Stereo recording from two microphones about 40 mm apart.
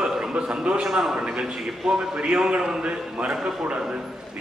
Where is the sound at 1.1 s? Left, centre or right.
Right.